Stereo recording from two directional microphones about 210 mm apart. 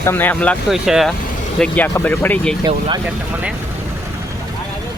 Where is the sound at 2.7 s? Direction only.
25° right (ahead or behind).